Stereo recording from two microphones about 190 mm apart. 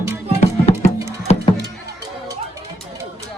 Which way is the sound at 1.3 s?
35° left (ahead or behind).